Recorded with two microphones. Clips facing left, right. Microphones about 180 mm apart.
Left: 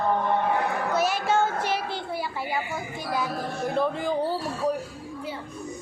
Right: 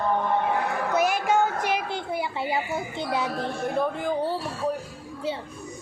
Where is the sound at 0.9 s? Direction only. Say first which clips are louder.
Right 2 dB; 15° right (ahead or behind).